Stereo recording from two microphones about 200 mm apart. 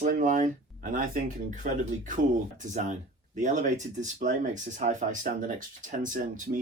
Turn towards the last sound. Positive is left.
turn(degrees=-40)  # may be behind; listen again after turning